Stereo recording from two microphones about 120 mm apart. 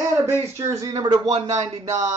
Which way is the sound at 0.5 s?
25° right (ahead or behind).